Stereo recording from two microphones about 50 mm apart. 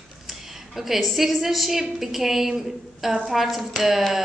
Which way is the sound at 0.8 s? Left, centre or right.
Centre.